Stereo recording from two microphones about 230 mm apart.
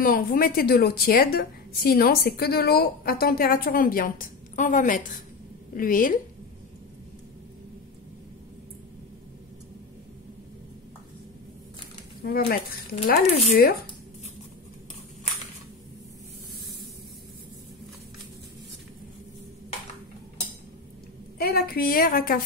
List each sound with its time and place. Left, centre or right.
0.0 s a woman's voice: left
12.3 s a woman's voice: left
21.4 s a woman's voice: left